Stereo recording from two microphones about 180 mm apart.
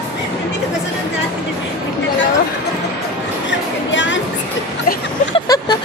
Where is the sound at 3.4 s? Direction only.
90° left.